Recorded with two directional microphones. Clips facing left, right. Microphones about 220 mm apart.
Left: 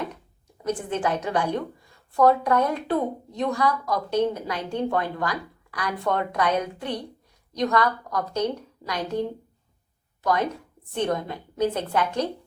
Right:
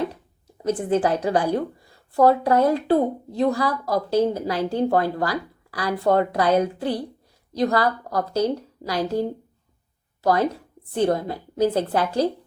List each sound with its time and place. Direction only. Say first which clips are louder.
0.9 s speech: right 8 dB; 35° right (ahead or behind)
10.9 s speech: right 5 dB; 35° right (ahead or behind)